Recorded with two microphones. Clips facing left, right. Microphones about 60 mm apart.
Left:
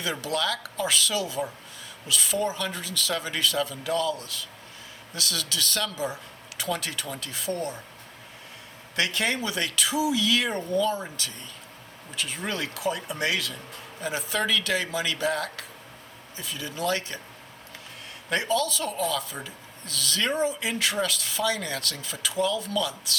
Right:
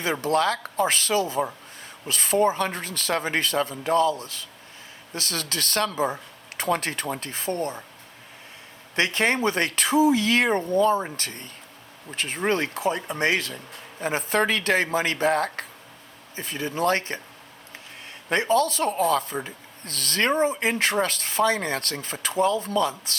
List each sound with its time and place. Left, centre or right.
0.0 s speech: right
9.0 s speech: right
18.3 s speech: right